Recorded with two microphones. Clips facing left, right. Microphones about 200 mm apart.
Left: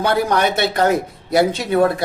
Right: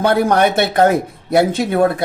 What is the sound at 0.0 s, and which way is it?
Speech, 50° right (ahead or behind).